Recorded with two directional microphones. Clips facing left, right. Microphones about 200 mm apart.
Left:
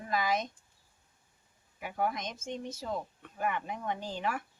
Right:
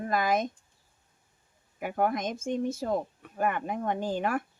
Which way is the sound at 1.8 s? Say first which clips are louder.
Right 6 dB; 50° right (ahead or behind).